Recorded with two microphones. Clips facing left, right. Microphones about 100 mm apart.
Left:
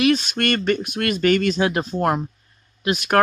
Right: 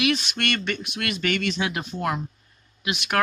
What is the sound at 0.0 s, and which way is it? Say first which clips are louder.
Speech: left 6 dB; 45° left (ahead or behind).